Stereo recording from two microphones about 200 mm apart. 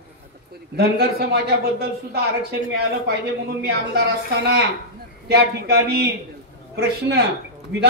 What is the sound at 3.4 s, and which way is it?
Speech, 55° right (ahead or behind).